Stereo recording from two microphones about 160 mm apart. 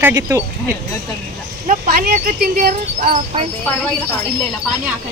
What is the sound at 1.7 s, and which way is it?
Speech, 75° right (ahead or behind).